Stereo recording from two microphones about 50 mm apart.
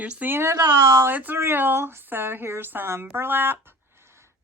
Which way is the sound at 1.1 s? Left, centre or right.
Right.